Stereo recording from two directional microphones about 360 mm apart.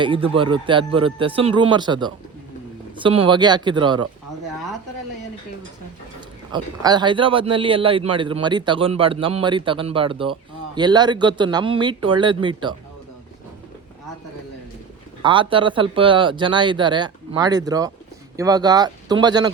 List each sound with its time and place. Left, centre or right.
0.0 s speech: centre
6.1 s speech: centre
15.2 s speech: centre